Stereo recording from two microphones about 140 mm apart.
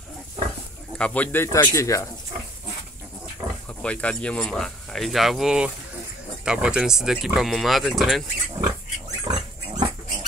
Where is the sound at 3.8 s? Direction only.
10° left (ahead or behind).